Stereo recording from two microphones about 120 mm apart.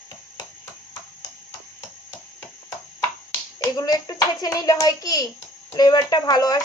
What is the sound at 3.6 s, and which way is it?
Speech, 30° left (ahead or behind).